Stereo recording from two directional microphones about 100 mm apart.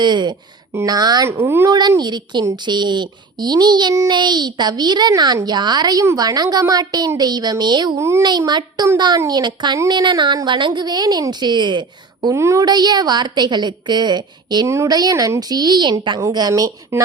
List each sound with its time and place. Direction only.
0.0 s a woman's voice: 50° right (ahead or behind)
1.3 s speech: 25° right (ahead or behind)
2.0 s a woman's voice: 45° right (ahead or behind)
7.9 s speech: 30° right (ahead or behind)
8.2 s a woman's voice: 45° right (ahead or behind)
12.3 s speech: 30° right (ahead or behind)
12.6 s a woman's voice: 45° right (ahead or behind)
16.5 s speech: 35° right (ahead or behind)